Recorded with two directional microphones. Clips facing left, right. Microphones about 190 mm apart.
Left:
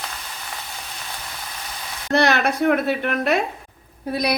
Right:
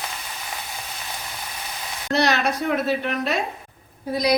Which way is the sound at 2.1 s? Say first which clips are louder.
Left 2 dB; 55° left (ahead or behind).